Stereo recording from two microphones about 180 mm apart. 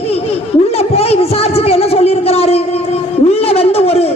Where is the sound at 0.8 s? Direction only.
35° left (ahead or behind).